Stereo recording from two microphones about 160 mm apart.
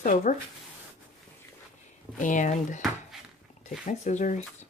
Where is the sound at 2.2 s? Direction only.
50° left (ahead or behind).